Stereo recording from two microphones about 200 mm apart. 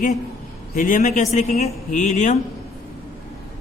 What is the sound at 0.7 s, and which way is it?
A man's voice, 40° left (ahead or behind).